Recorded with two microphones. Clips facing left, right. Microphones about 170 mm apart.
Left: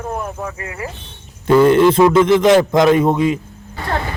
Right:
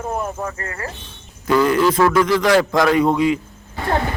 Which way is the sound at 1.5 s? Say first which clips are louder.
Left 5 dB; 25° left (ahead or behind).